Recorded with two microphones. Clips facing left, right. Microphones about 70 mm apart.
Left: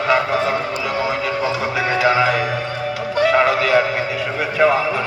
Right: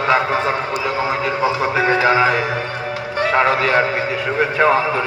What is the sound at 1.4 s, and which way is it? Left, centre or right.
Music, right.